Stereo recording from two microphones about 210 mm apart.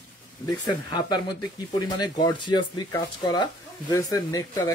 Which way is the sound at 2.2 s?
20° left (ahead or behind).